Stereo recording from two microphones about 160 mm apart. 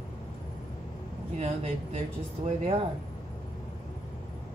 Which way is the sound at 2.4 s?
45° right (ahead or behind).